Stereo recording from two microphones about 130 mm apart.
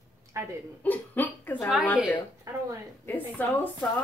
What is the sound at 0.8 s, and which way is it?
Speech, 15° left (ahead or behind).